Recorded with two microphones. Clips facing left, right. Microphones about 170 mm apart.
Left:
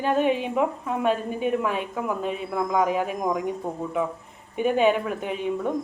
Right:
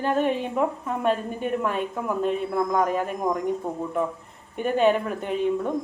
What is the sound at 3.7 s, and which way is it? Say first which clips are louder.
Speech: right 1 dB; 15° left (ahead or behind).